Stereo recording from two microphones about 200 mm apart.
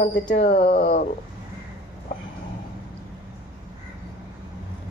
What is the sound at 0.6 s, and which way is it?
Speech, 50° left (ahead or behind).